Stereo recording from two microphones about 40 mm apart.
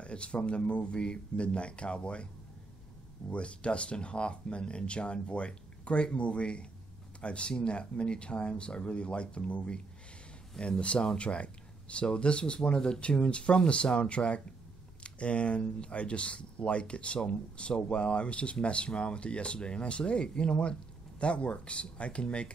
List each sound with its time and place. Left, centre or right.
0.0 s speech: left
3.3 s speech: left